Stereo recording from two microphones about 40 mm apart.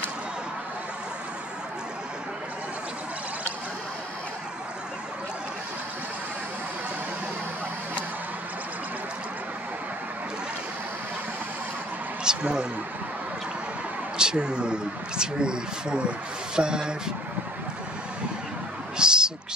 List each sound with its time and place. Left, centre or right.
12.3 s a man's voice: right
14.1 s speech: right
18.9 s a sound: centre